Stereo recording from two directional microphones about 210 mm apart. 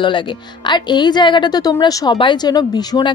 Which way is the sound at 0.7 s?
20° left (ahead or behind).